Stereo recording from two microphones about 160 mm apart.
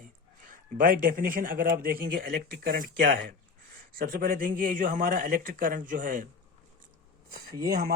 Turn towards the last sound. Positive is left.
turn(degrees=-70)  # may be behind; listen again after turning